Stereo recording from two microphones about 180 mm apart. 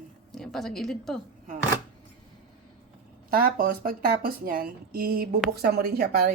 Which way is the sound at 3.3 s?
55° right (ahead or behind).